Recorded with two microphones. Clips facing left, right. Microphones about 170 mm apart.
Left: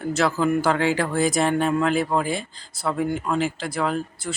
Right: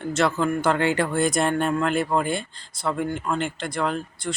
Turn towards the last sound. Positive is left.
turn(degrees=5)  # may be behind; listen again after turning